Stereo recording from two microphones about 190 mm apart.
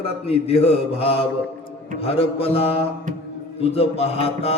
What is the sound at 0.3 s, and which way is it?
Music, 30° left (ahead or behind).